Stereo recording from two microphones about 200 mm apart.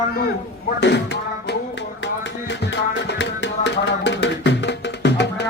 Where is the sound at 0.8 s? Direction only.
60° left (ahead or behind).